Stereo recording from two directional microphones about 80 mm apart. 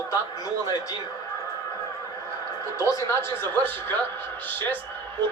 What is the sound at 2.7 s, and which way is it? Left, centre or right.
Speech, left.